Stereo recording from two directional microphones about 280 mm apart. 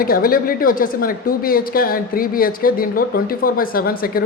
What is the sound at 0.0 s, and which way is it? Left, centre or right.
Speech, left.